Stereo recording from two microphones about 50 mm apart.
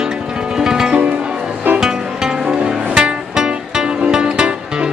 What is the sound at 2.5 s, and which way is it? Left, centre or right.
Music, centre.